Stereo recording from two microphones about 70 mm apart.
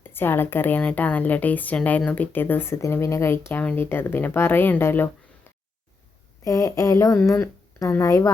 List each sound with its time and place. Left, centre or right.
0.0 s speech: left
0.8 s speech: centre; by 5.1 s left
6.4 s speech: left
8.0 s speech: left